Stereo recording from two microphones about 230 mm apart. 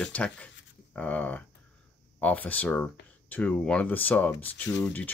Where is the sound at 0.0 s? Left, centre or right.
Centre.